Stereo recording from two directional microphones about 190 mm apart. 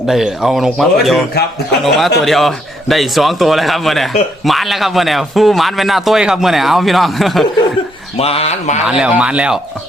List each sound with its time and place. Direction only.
0.1 s a man's voice: centre (ahead or behind)
8.2 s speech: 30° left (ahead or behind)
8.9 s a man's voice: 5° right (ahead or behind)